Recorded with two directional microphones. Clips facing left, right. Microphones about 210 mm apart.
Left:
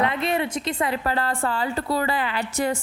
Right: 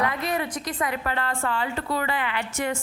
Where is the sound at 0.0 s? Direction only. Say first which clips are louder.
Left 3 dB; 25° left (ahead or behind).